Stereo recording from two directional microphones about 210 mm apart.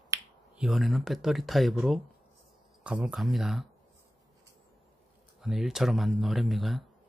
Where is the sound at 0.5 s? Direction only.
Centre (ahead or behind).